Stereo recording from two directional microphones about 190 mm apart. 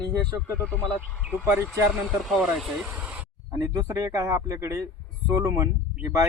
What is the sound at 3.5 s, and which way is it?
Speech, 15° right (ahead or behind).